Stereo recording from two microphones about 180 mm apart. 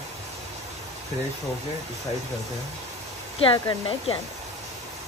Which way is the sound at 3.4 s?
30° left (ahead or behind).